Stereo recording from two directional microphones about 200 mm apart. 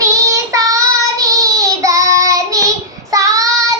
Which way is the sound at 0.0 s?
15° right (ahead or behind).